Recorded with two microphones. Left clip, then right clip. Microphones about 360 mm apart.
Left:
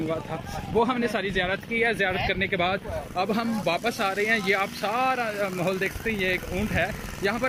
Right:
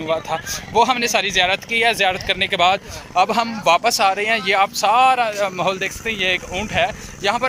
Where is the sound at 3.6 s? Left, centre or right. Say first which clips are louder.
Right 13 dB; right.